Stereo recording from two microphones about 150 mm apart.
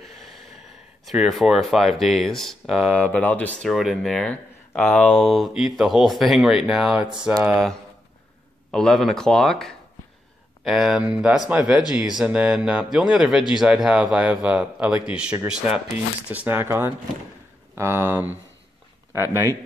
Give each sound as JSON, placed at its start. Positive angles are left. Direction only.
{"t": 0.0, "sound": "gasp", "side_deg": 0}
{"t": 1.0, "sound": "speech", "side_deg": -5}
{"t": 3.7, "sound": "speech", "side_deg": 0}
{"t": 8.7, "sound": "speech", "side_deg": 5}